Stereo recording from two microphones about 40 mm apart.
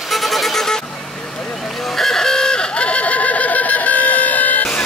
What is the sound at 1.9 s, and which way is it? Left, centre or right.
Chicken, centre.